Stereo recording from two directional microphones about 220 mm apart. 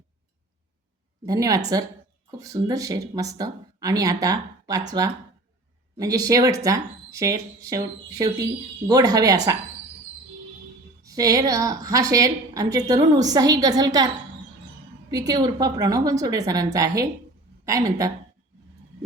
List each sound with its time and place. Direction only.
1.2 s speech: 15° right (ahead or behind)
11.0 s speech: 15° right (ahead or behind)
15.1 s speech: 15° right (ahead or behind)